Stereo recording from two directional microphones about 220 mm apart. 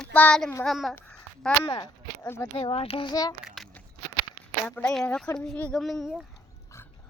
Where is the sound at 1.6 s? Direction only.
25° left (ahead or behind).